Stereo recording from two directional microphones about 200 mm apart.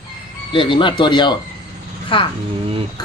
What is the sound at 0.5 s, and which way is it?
Speech, 25° left (ahead or behind).